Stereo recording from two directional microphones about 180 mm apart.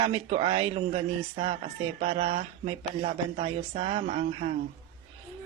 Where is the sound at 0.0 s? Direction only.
30° right (ahead or behind).